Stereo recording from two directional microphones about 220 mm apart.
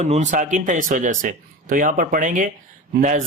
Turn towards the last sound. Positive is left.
turn(degrees=-35)  # may be behind; listen again after turning